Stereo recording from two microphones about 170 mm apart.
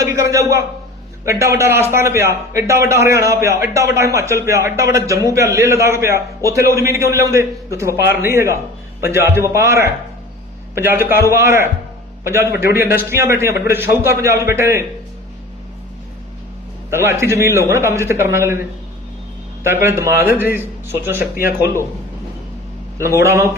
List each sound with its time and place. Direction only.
0.0 s a man's voice: 20° right (ahead or behind)
16.9 s a man's voice: 15° right (ahead or behind)
19.6 s a man's voice: 15° right (ahead or behind)
23.0 s a man's voice: 15° right (ahead or behind)